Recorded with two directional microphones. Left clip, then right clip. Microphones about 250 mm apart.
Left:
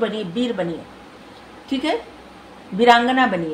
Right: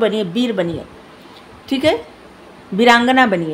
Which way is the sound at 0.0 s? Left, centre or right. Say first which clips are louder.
Right 6 dB; right.